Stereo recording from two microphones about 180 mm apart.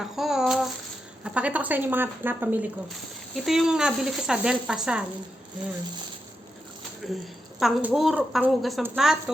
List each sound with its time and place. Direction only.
0.0 s speech: centre (ahead or behind)
7.0 s speech: centre (ahead or behind)